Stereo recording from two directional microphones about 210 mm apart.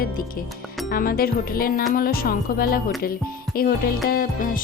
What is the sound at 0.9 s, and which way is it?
Speech, 45° left (ahead or behind).